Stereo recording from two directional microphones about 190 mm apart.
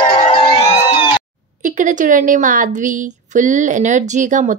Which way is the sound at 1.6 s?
45° right (ahead or behind).